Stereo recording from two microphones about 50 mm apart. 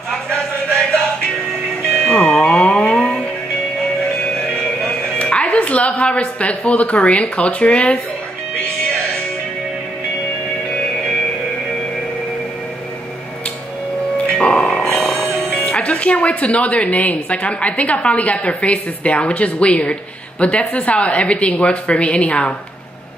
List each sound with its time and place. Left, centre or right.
0.3 s music: centre
4.8 s a sound: left
6.0 s speech: left
14.1 s music: left
15.0 s music: centre
15.5 s speech: left